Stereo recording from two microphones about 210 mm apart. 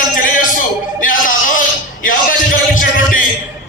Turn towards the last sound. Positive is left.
turn(degrees=40)  # may be behind; listen again after turning